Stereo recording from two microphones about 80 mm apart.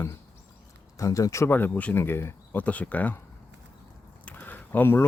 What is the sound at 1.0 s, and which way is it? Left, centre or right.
Speech, left.